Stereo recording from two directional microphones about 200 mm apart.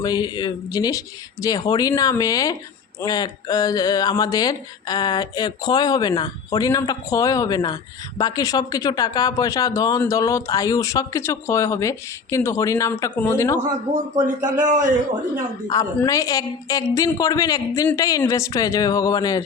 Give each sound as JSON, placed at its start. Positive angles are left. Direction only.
{"t": 0.0, "sound": "speech", "side_deg": 20}
{"t": 14.2, "sound": "speech", "side_deg": -20}
{"t": 14.6, "sound": "a man's voice", "side_deg": -40}
{"t": 15.6, "sound": "speech", "side_deg": 20}